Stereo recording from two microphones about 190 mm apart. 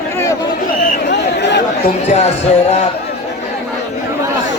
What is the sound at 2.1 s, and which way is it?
Speech, 35° left (ahead or behind).